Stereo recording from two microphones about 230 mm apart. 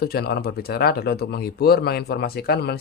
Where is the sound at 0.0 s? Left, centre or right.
Left.